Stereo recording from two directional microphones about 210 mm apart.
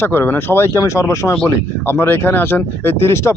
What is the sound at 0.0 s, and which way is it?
Speech, 10° left (ahead or behind).